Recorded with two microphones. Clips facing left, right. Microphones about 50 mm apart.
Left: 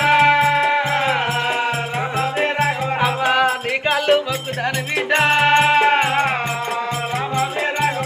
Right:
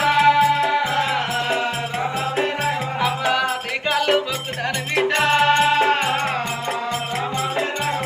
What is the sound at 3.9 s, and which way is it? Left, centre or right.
Music, centre.